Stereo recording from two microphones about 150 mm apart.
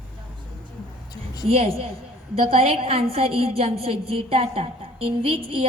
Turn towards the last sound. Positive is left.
turn(degrees=-35)  # may be behind; listen again after turning